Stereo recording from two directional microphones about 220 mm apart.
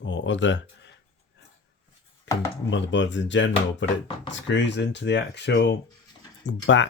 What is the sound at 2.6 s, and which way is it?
Speech, 55° left (ahead or behind).